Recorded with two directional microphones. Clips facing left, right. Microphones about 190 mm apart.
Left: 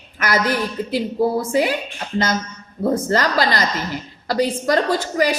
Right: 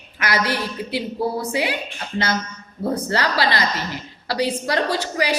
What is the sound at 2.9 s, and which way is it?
A woman's voice, 45° left (ahead or behind).